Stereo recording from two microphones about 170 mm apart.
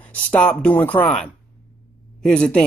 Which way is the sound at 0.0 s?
10° left (ahead or behind).